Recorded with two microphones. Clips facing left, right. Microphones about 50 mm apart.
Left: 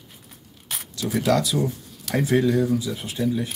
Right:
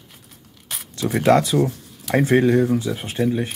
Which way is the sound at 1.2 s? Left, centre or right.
Right.